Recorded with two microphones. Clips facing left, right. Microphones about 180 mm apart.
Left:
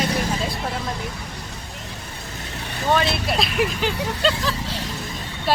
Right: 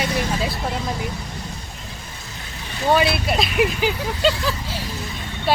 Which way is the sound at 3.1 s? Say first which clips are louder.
Right 2 dB; centre (ahead or behind).